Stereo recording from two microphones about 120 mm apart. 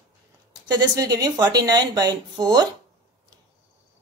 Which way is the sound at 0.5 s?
35° right (ahead or behind).